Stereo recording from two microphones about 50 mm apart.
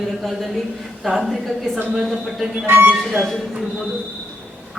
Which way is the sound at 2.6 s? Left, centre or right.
Right.